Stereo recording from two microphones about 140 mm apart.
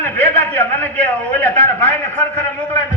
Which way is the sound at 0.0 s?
15° left (ahead or behind).